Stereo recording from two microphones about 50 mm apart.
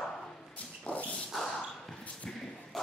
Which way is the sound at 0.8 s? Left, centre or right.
Left.